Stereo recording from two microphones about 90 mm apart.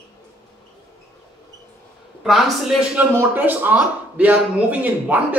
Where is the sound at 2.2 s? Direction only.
5° right (ahead or behind).